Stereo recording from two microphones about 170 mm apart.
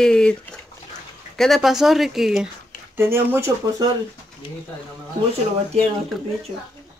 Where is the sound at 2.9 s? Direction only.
15° right (ahead or behind).